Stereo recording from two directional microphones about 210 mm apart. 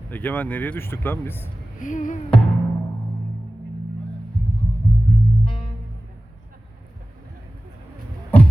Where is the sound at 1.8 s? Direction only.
40° left (ahead or behind).